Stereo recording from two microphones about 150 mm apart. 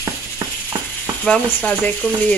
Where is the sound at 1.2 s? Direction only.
10° left (ahead or behind).